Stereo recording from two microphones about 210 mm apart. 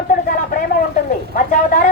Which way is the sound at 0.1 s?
40° left (ahead or behind).